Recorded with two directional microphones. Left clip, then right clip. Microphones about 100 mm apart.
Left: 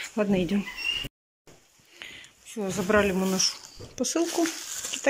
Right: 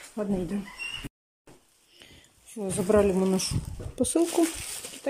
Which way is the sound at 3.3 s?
60° right (ahead or behind).